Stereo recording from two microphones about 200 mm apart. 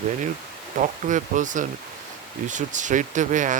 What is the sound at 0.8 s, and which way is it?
Speech, 40° right (ahead or behind).